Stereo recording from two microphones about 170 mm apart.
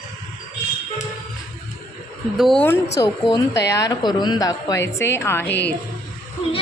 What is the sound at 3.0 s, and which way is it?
A woman's voice, 25° left (ahead or behind).